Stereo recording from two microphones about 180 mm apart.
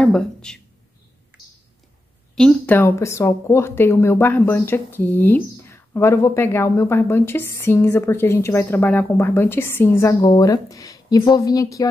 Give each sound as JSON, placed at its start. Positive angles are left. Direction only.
{"t": 0.0, "sound": "speech", "side_deg": 5}
{"t": 2.3, "sound": "speech", "side_deg": 5}